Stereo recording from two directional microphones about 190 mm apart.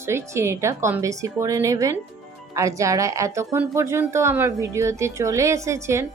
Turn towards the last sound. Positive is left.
turn(degrees=-15)  # may be behind; listen again after turning